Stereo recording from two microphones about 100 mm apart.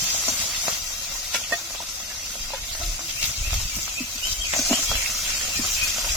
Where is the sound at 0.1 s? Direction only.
20° right (ahead or behind).